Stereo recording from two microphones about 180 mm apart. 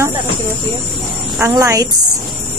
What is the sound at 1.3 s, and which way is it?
Speech, 15° right (ahead or behind).